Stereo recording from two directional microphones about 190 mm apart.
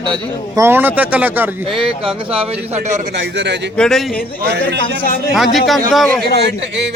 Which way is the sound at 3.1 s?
65° right (ahead or behind).